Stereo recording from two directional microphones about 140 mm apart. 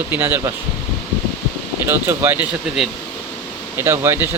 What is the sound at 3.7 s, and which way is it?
Speech, 15° right (ahead or behind).